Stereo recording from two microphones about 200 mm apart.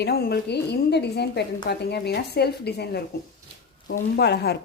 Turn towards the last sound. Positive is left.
turn(degrees=55)  # may be behind; listen again after turning